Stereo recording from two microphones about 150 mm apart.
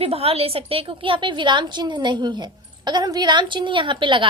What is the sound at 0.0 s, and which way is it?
A woman's voice, 40° right (ahead or behind).